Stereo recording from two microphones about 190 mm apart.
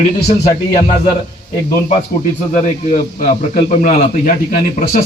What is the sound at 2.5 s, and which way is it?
A man's voice, 40° left (ahead or behind).